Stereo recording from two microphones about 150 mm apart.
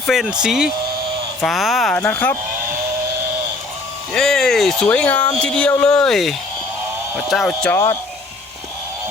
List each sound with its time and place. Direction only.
0.1 s speech: 5° right (ahead or behind)
2.0 s speech: 15° left (ahead or behind)
4.1 s speech: 5° left (ahead or behind)
7.7 s speech: 20° left (ahead or behind)